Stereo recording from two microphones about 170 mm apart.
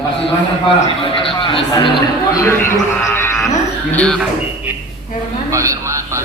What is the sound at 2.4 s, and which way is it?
A man's voice, 15° left (ahead or behind).